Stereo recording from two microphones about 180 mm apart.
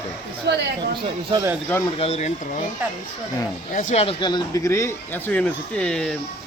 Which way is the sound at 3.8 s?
45° left (ahead or behind).